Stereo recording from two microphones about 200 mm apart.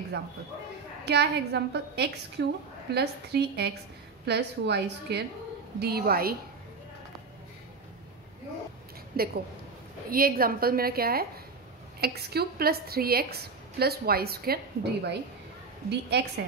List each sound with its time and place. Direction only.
1.0 s a woman's voice: 55° right (ahead or behind)
9.1 s a woman's voice: 50° right (ahead or behind)